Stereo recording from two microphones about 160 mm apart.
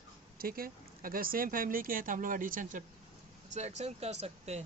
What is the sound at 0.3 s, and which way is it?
Speech, 65° right (ahead or behind).